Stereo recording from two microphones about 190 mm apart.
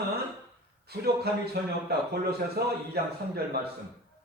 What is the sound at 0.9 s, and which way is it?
Speech, 55° right (ahead or behind).